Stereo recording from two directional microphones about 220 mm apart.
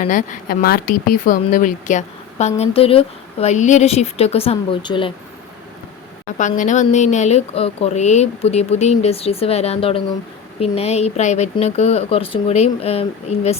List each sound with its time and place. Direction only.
0.0 s speech: 35° left (ahead or behind)
6.6 s speech: 35° left (ahead or behind)